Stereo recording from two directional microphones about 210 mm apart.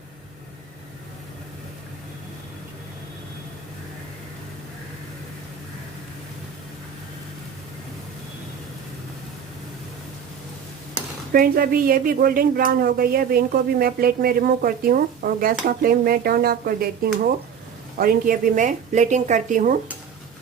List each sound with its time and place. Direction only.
11.3 s speech: 45° right (ahead or behind)